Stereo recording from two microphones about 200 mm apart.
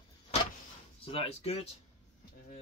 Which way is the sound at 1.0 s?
30° left (ahead or behind).